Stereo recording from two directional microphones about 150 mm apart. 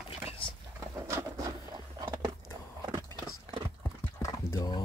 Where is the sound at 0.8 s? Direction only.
20° right (ahead or behind).